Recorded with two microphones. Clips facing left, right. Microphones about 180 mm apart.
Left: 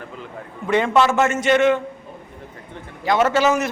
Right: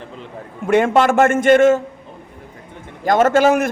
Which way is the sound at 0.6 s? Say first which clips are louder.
Right 3 dB; 50° right (ahead or behind).